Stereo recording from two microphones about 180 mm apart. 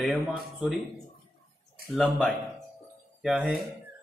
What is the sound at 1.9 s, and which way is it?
Speech, 5° left (ahead or behind).